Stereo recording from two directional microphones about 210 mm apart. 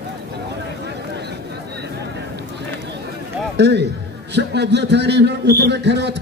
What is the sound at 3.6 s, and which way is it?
A man's voice, 55° right (ahead or behind).